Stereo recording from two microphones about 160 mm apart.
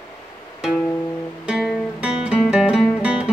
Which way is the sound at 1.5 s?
Centre (ahead or behind).